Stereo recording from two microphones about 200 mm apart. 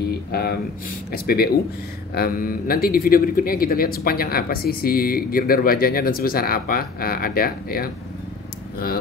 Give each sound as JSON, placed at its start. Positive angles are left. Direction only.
{"t": 0.3, "sound": "speech", "side_deg": 50}